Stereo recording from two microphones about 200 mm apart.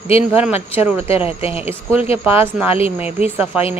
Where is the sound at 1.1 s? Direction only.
30° left (ahead or behind).